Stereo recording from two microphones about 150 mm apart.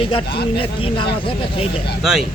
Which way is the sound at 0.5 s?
35° left (ahead or behind).